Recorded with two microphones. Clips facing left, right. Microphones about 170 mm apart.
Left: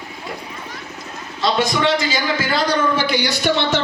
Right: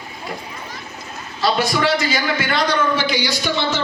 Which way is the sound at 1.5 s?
25° left (ahead or behind).